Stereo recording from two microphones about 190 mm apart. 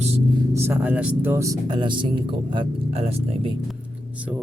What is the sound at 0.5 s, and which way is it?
Speech, 10° right (ahead or behind).